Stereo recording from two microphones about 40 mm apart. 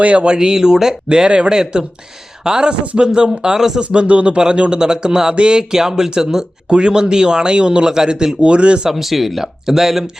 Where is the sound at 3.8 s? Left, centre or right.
Right.